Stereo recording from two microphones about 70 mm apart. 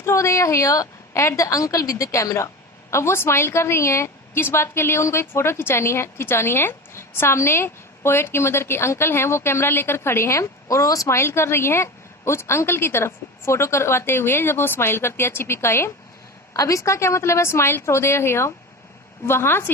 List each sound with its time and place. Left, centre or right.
0.0 s a woman's voice: left
11.2 s a woman's voice: left
16.6 s a woman's voice: left